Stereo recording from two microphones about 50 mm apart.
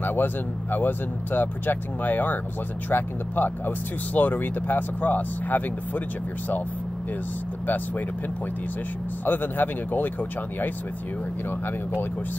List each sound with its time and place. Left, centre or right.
0.0 s speech: left
9.2 s speech: left